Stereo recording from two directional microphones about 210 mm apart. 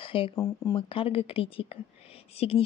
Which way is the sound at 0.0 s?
25° left (ahead or behind).